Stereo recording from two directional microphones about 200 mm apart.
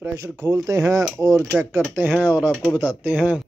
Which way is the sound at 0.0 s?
15° right (ahead or behind).